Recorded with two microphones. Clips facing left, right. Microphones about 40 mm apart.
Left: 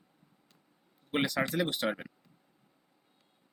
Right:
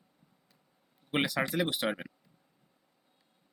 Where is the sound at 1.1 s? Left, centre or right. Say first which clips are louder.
Even; centre.